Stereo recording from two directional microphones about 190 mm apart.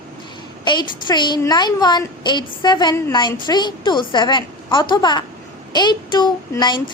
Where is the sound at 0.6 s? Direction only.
25° left (ahead or behind).